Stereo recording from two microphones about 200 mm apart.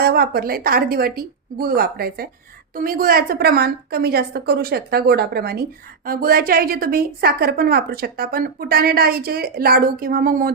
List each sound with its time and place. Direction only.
0.0 s a woman's voice: 50° right (ahead or behind)